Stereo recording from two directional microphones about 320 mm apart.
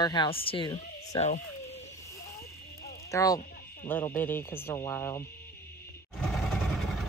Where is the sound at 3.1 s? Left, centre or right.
Centre.